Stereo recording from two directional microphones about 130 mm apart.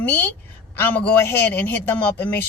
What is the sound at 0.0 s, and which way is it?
A woman's voice, 15° left (ahead or behind).